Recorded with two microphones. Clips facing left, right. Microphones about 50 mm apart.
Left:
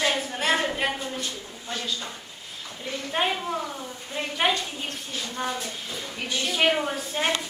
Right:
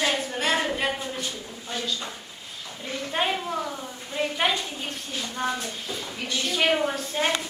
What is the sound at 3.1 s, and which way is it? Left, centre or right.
Speech, centre.